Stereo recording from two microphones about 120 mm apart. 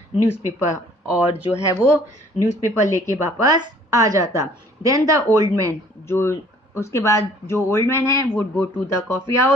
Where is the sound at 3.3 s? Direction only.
35° right (ahead or behind).